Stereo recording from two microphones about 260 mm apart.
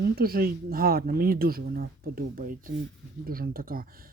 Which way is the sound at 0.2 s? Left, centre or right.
Right.